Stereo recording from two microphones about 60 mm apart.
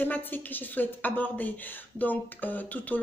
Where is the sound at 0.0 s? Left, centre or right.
Left.